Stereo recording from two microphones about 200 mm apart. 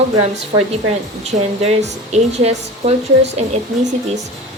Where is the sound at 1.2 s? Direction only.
30° right (ahead or behind).